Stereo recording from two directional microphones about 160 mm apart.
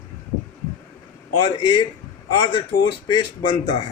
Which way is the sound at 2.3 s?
35° left (ahead or behind).